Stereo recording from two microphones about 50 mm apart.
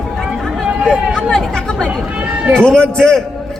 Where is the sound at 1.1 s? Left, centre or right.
Centre.